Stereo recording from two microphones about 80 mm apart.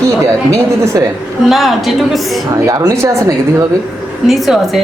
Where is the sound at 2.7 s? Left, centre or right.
Right.